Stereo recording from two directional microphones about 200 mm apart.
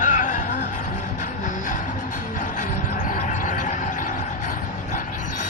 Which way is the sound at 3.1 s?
40° left (ahead or behind).